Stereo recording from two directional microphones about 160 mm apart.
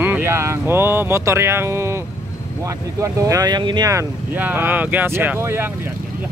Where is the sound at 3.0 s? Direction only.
20° right (ahead or behind).